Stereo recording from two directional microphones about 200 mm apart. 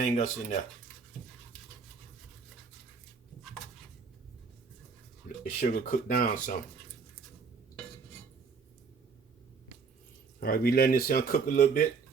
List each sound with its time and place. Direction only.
0.0 s speech: 35° left (ahead or behind)
5.4 s speech: 45° left (ahead or behind)
10.4 s speech: 50° left (ahead or behind)